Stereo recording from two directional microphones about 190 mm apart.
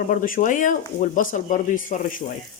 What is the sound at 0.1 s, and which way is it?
Speech, 45° left (ahead or behind).